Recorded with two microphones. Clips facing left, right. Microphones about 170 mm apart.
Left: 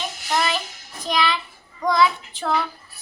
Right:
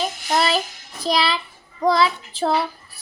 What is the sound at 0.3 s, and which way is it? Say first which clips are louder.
Music: right 3 dB; 35° right (ahead or behind).